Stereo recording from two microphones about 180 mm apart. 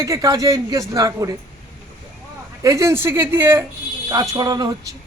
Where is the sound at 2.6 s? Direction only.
15° right (ahead or behind).